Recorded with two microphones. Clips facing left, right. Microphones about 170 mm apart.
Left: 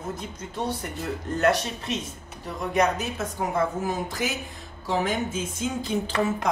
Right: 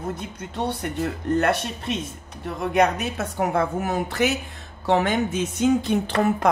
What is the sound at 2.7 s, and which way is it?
Speech, 65° right (ahead or behind).